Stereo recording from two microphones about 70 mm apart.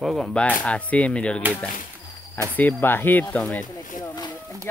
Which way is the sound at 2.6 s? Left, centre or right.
Left.